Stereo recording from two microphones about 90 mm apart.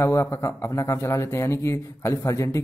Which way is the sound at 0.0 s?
30° left (ahead or behind).